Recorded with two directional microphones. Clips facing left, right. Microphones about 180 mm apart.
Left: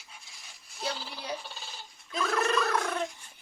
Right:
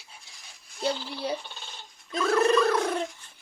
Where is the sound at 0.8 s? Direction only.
Centre (ahead or behind).